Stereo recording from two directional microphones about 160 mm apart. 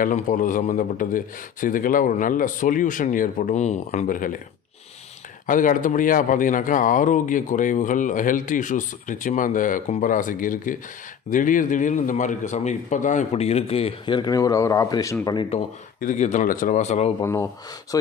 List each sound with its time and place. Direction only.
0.0 s speech: 55° left (ahead or behind)
5.5 s a man's voice: 55° left (ahead or behind); by 15.1 s 20° left (ahead or behind)
15.5 s a man's voice: 40° left (ahead or behind)
16.0 s speech: 50° left (ahead or behind)
17.2 s speech: 15° left (ahead or behind)